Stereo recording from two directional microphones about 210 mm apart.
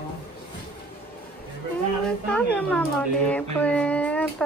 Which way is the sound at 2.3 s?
5° left (ahead or behind).